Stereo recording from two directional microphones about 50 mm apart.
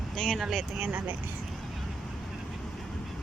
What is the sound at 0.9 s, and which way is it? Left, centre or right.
Speech, right.